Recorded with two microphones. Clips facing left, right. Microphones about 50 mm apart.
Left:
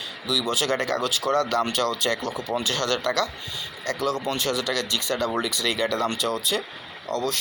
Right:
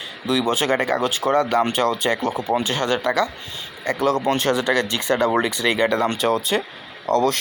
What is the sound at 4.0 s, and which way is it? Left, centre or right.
Speech, right.